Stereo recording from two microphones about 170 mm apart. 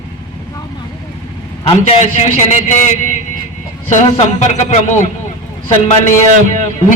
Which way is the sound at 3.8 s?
45° left (ahead or behind).